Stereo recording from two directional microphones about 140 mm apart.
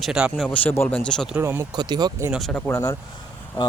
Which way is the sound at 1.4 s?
15° right (ahead or behind).